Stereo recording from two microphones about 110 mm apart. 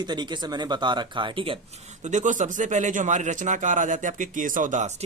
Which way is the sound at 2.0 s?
90° right.